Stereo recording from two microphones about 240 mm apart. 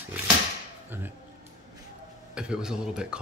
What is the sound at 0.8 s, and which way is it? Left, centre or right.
Music, centre.